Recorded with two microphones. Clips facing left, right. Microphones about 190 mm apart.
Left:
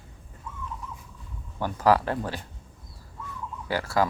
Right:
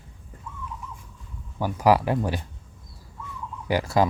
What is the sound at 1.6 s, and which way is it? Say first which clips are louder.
Speech: right 2 dB; 10° right (ahead or behind).